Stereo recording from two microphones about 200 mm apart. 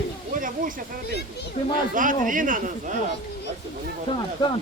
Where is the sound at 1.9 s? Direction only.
40° right (ahead or behind).